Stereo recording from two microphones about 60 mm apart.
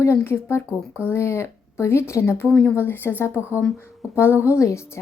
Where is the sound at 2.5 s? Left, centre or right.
Left.